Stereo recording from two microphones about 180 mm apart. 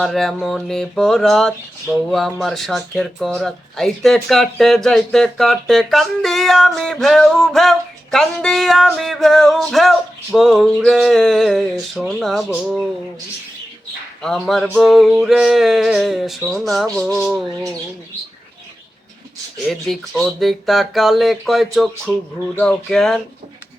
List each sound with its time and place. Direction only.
0.0 s speech: centre (ahead or behind)
14.2 s speech: 5° left (ahead or behind)
19.5 s speech: centre (ahead or behind)